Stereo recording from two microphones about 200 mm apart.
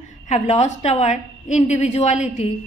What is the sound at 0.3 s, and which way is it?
A woman's voice, 35° left (ahead or behind).